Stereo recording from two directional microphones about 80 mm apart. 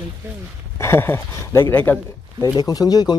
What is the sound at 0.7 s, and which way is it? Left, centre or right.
Speech, left.